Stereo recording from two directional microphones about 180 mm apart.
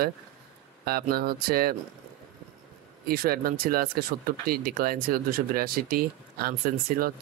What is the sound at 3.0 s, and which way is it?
Speech, 55° right (ahead or behind).